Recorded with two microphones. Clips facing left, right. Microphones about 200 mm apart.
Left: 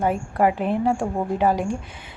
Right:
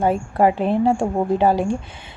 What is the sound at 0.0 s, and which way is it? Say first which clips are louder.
A woman's voice: right 3 dB; 30° right (ahead or behind).